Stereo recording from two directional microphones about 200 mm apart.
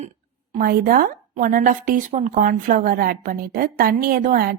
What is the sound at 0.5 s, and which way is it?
A woman's voice, 45° right (ahead or behind).